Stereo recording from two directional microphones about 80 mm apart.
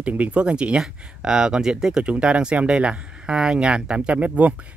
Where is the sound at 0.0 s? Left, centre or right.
Centre.